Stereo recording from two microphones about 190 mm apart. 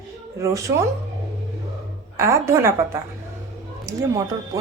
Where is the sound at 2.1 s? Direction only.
15° right (ahead or behind).